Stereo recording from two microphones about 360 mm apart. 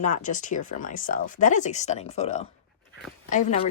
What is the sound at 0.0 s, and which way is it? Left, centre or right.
Speech, left.